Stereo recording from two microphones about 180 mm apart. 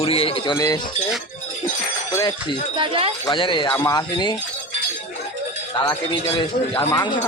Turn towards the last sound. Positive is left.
turn(degrees=20)  # may be behind; listen again after turning